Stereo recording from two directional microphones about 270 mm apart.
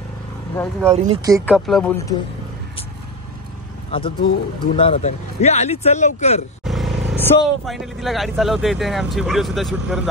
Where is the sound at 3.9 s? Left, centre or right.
Centre.